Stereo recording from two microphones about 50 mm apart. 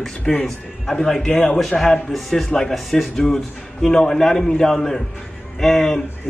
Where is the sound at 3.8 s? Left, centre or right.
Centre.